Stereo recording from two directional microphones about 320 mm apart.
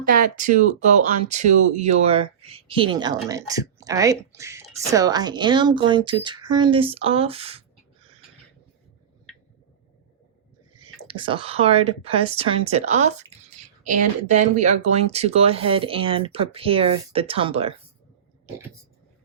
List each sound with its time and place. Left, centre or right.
0.0 s speech: right
10.8 s speech: centre